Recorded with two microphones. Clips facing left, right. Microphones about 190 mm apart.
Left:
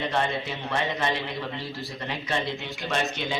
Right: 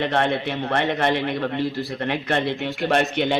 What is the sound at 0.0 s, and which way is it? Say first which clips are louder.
A man's voice: right 6 dB; 65° right (ahead or behind).